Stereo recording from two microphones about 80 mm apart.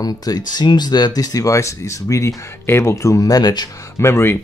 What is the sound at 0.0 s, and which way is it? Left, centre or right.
Speech, left.